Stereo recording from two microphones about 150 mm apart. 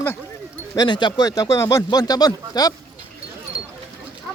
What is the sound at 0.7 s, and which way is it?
Speech, 30° left (ahead or behind).